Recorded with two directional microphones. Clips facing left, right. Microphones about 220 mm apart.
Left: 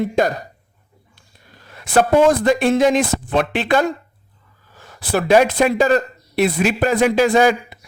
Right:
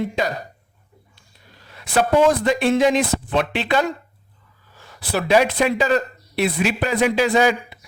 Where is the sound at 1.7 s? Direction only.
50° left (ahead or behind).